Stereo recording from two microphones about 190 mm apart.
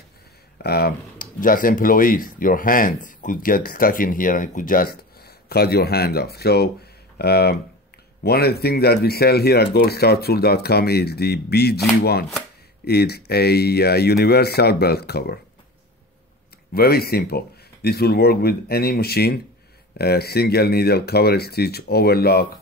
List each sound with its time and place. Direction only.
0.6 s speech: 55° left (ahead or behind)
16.7 s speech: 55° left (ahead or behind)